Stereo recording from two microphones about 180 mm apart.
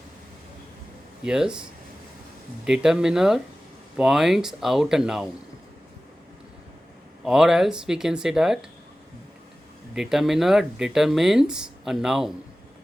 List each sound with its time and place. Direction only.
1.2 s speech: 5° right (ahead or behind)
2.6 s speech: 5° right (ahead or behind)
7.3 s speech: 5° right (ahead or behind)
9.9 s speech: centre (ahead or behind)